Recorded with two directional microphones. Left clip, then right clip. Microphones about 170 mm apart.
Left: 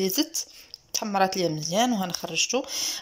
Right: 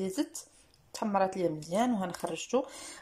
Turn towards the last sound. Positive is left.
turn(degrees=-5)  # may be behind; listen again after turning